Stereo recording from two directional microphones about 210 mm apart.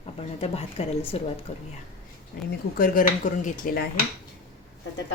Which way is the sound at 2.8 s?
40° left (ahead or behind).